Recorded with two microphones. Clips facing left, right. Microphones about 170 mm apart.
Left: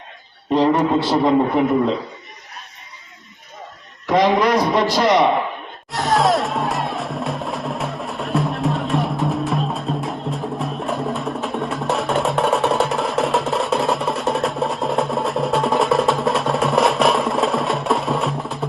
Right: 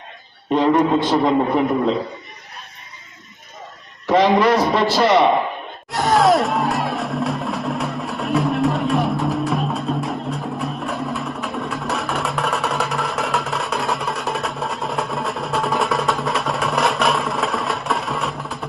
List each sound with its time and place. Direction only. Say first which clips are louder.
0.5 s a sound: even; 30° left (ahead or behind)
4.0 s a man's voice: right 1 dB; 15° left (ahead or behind)
5.9 s music: right 2 dB; centre (ahead or behind)